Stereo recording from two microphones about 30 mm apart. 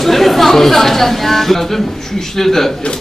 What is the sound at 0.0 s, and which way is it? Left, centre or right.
Speech, centre.